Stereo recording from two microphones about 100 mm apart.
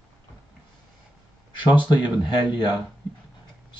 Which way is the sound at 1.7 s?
50° left (ahead or behind).